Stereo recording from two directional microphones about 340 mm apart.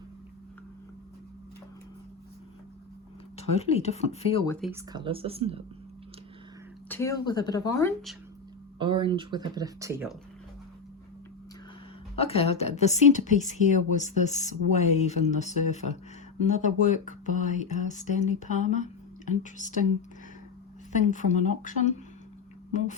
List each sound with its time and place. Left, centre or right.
3.3 s speech: centre
4.6 s speech: centre
6.8 s speech: centre
8.8 s speech: centre
12.1 s speech: centre
20.9 s speech: left